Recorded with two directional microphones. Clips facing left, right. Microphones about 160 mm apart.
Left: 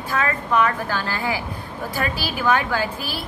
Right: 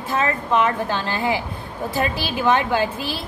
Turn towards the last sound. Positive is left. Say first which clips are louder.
# right 3 dB
turn(degrees=-25)  # may be behind; listen again after turning